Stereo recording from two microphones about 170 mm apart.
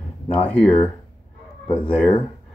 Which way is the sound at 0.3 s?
5° left (ahead or behind).